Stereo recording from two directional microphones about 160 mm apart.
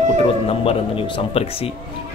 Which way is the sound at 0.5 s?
35° left (ahead or behind).